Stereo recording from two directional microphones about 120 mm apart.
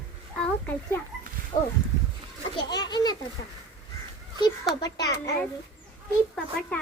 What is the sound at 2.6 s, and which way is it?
Children playing, 35° left (ahead or behind).